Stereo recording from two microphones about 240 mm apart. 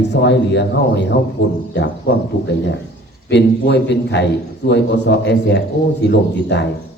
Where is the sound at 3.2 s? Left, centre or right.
Left.